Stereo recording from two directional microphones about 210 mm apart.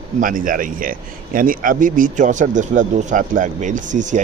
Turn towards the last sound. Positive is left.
turn(degrees=-35)  # may be behind; listen again after turning